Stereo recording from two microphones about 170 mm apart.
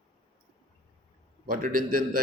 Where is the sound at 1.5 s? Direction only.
55° right (ahead or behind).